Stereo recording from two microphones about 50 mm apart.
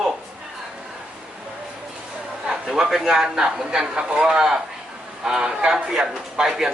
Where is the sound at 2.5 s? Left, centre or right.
Centre.